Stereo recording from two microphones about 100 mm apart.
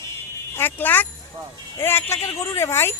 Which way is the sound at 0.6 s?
20° left (ahead or behind).